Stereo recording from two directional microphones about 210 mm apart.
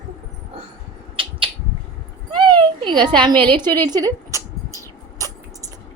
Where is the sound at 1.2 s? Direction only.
25° right (ahead or behind).